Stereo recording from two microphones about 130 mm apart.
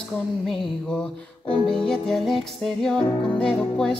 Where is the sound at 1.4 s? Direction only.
40° left (ahead or behind).